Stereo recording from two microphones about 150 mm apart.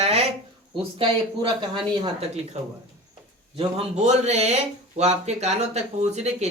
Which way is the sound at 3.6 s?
45° right (ahead or behind).